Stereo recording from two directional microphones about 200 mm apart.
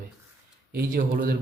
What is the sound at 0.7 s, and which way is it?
Speech, 50° right (ahead or behind).